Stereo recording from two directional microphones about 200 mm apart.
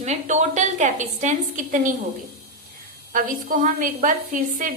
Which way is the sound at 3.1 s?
40° right (ahead or behind).